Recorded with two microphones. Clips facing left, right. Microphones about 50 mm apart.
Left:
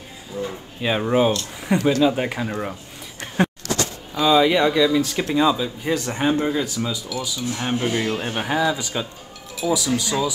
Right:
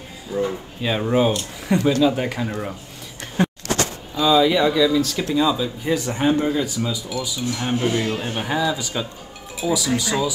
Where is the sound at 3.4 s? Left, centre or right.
Left.